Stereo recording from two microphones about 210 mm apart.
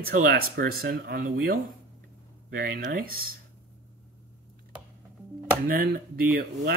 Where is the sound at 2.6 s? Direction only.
40° right (ahead or behind).